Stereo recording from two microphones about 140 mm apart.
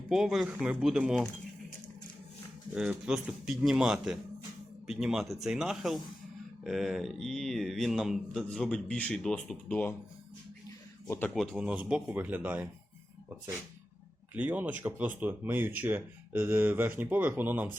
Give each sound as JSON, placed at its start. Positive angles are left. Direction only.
{"t": 0.1, "sound": "a man's voice", "side_deg": -5}
{"t": 2.7, "sound": "a man's voice", "side_deg": -5}
{"t": 11.3, "sound": "speech", "side_deg": -5}
{"t": 14.3, "sound": "speech", "side_deg": -10}